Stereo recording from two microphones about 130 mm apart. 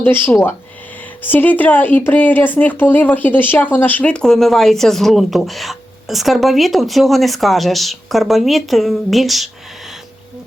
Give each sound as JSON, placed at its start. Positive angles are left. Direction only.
{"t": 0.0, "sound": "speech", "side_deg": 15}